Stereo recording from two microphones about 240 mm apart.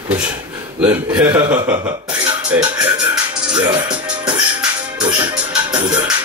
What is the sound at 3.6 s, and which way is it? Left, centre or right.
Music, centre.